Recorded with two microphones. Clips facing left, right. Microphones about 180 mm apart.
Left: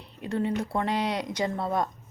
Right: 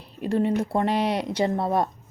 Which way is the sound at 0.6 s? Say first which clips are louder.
Right 4 dB; 25° right (ahead or behind).